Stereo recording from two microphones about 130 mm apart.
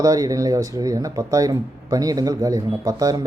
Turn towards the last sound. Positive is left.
turn(degrees=-30)  # may be behind; listen again after turning